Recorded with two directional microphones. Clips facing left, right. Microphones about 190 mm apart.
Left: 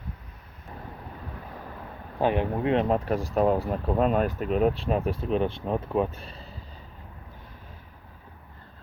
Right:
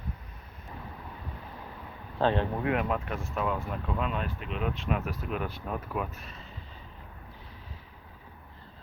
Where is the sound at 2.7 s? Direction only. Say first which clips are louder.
Left 6 dB; 35° left (ahead or behind).